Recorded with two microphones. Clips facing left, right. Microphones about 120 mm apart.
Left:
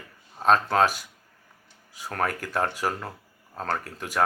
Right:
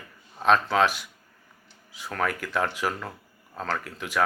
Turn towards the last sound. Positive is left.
turn(degrees=40)  # may be behind; listen again after turning